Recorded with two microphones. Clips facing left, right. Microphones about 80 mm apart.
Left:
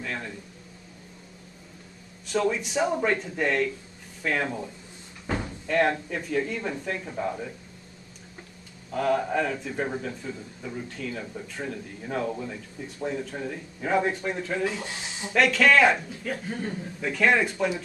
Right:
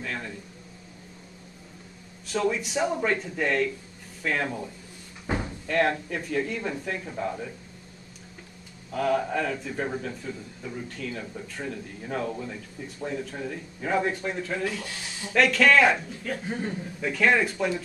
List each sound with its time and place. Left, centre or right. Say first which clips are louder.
0.0 s a sound: even; centre
2.2 s speech: left 1 dB; centre
5.2 s cupboard open or close: right 1 dB; centre
5.7 s speech: left 1 dB; centre
8.9 s speech: left 1 dB; centre
14.6 s speech: left 2 dB; left
15.3 s speech: even; centre
16.4 s a man's voice: right 1 dB; centre
16.7 s speech: even; centre